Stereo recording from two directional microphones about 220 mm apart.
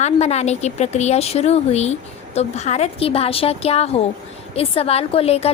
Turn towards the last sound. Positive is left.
turn(degrees=25)  # may be behind; listen again after turning